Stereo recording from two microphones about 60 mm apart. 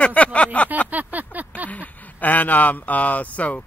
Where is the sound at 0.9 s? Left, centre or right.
Right.